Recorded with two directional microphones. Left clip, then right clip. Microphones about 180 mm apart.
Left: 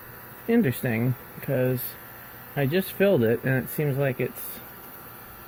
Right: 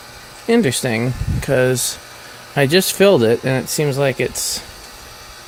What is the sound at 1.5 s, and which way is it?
Speech, 40° right (ahead or behind).